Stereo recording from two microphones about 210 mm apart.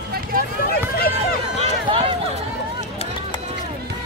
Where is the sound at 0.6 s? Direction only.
45° left (ahead or behind).